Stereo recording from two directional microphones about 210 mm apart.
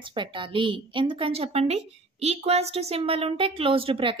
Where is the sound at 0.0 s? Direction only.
25° right (ahead or behind).